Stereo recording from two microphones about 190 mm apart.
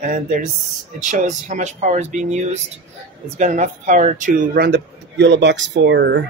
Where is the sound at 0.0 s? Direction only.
45° right (ahead or behind).